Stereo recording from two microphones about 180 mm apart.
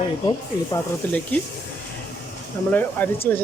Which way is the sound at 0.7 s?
10° left (ahead or behind).